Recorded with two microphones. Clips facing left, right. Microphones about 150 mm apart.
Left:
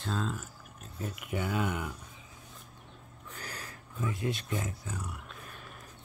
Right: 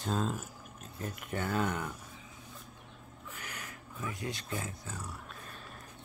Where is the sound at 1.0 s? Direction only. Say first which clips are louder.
Left 2 dB; 10° left (ahead or behind).